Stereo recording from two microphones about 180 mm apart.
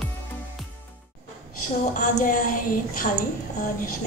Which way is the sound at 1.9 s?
45° left (ahead or behind).